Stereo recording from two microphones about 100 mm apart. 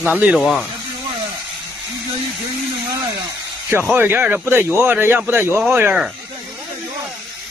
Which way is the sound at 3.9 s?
20° right (ahead or behind).